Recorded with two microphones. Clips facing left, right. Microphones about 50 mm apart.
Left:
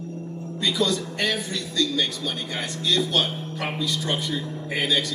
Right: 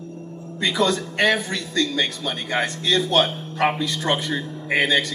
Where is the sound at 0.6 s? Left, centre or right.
Right.